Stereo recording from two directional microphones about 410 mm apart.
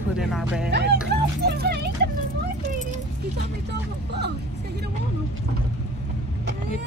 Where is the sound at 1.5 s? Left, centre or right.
Right.